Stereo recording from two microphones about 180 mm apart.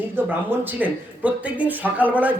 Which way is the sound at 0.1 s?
10° right (ahead or behind).